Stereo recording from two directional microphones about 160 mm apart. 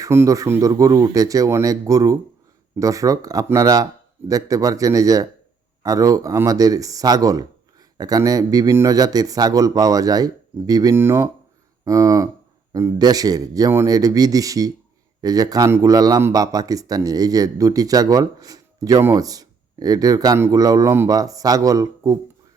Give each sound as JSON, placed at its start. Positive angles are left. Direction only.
{"t": 0.0, "sound": "a man's voice", "side_deg": -20}